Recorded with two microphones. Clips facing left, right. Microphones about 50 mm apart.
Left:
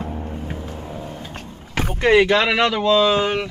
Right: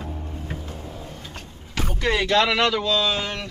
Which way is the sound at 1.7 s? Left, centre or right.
Left.